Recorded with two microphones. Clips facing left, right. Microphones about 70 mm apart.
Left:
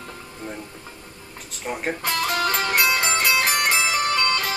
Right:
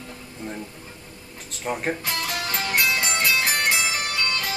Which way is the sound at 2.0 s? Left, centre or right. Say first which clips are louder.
Left 5 dB; left.